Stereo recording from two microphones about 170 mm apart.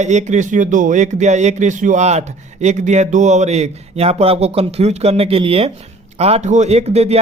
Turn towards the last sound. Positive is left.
turn(degrees=-40)  # may be behind; listen again after turning